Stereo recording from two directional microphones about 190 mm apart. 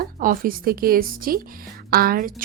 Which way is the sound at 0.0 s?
50° right (ahead or behind).